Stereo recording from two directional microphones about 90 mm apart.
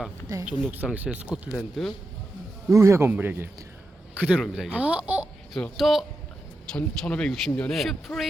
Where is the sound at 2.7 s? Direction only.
35° right (ahead or behind).